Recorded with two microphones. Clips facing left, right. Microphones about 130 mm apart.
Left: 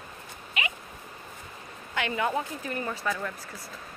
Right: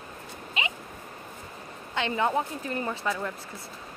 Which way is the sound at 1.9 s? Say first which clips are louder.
Right 2 dB; 25° right (ahead or behind).